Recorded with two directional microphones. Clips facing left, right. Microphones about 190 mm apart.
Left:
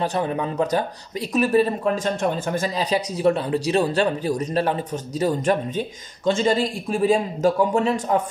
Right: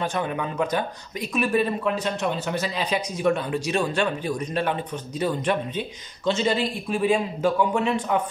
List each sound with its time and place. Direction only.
0.0 s speech: 35° left (ahead or behind)